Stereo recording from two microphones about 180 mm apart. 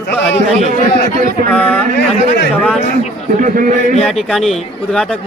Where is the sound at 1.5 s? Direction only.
5° left (ahead or behind).